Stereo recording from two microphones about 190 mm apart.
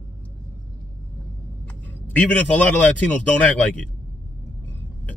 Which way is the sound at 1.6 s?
10° left (ahead or behind).